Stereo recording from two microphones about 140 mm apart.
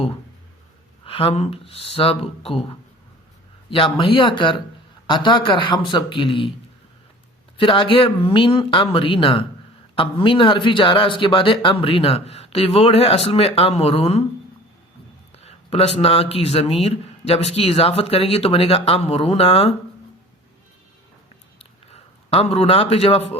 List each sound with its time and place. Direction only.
1.0 s speech: 40° left (ahead or behind)
3.7 s speech: 40° left (ahead or behind)
7.5 s speech: 35° left (ahead or behind)
15.4 s speech: 45° left (ahead or behind)
21.6 s a sound: 45° left (ahead or behind)